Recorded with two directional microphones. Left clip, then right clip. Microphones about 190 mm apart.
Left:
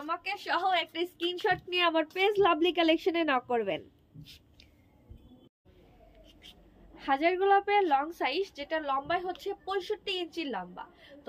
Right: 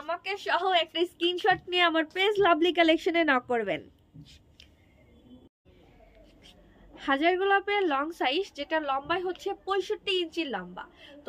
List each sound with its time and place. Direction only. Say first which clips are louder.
0.0 s a woman's voice: right 2 dB; 15° right (ahead or behind)
7.0 s a woman's voice: right 2 dB; 20° right (ahead or behind)